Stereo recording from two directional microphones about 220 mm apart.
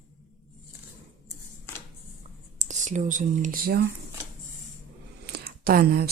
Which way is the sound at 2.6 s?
35° right (ahead or behind).